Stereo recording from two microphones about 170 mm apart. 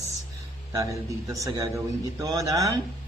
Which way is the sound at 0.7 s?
20° right (ahead or behind).